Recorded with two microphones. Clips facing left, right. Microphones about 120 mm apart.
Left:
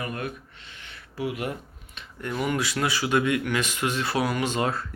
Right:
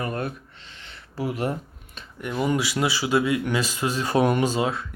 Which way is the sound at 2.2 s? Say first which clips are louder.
Right 3 dB; 20° right (ahead or behind).